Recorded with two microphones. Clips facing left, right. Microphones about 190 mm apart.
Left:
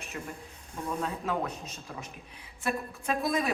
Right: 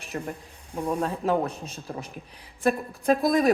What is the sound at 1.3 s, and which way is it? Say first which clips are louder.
Speech: right 7 dB; 30° right (ahead or behind).